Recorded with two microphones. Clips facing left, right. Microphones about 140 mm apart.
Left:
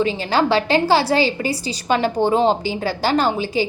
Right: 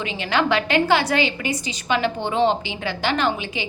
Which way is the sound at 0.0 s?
35° left (ahead or behind).